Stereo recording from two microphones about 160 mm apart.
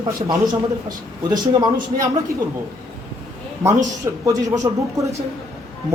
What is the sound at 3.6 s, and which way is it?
Speech, 20° right (ahead or behind).